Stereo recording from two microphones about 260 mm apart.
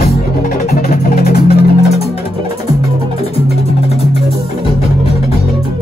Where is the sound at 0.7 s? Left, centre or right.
Left.